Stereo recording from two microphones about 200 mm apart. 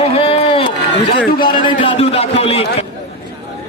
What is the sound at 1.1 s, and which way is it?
Speech, 50° left (ahead or behind).